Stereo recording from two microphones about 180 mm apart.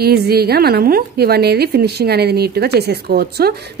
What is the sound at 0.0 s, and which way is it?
A woman's voice, 60° right (ahead or behind).